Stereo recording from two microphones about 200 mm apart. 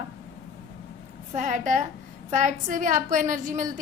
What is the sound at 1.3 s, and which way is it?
A woman's voice, 40° right (ahead or behind).